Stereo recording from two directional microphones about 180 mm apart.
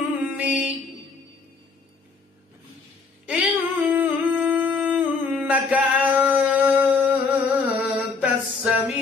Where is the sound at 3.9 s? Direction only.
10° right (ahead or behind).